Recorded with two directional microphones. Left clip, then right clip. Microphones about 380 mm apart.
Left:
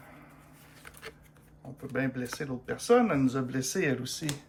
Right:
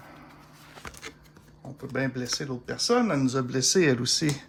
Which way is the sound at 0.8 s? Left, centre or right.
Centre.